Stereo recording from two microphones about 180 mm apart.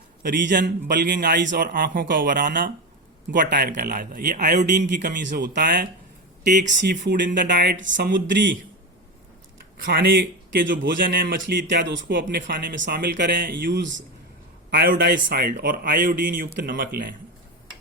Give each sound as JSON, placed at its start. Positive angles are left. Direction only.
{"t": 0.2, "sound": "a man's voice", "side_deg": -55}
{"t": 7.0, "sound": "speech", "side_deg": -75}
{"t": 7.3, "sound": "a man's voice", "side_deg": -50}
{"t": 7.6, "sound": "speech", "side_deg": -75}
{"t": 9.8, "sound": "a man's voice", "side_deg": -60}
{"t": 13.1, "sound": "speech", "side_deg": -60}
{"t": 14.7, "sound": "a man's voice", "side_deg": -55}